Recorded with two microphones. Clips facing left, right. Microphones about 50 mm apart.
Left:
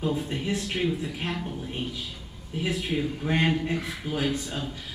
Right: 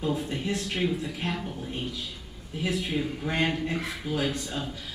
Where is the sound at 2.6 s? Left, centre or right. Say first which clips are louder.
Left 1 dB; centre.